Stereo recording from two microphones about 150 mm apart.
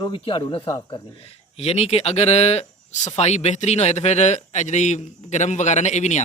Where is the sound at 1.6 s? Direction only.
45° left (ahead or behind).